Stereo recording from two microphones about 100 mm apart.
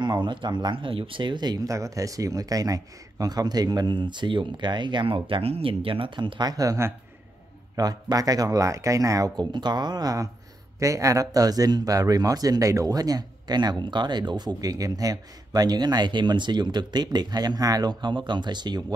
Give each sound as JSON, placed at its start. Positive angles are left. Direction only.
{"t": 0.0, "sound": "speech", "side_deg": -50}
{"t": 0.9, "sound": "speech", "side_deg": -60}